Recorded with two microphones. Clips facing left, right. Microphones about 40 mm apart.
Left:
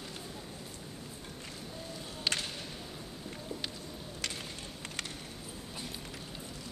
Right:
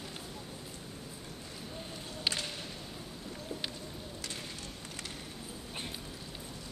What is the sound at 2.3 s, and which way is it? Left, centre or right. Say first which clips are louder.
Whip: left 1 dB; centre.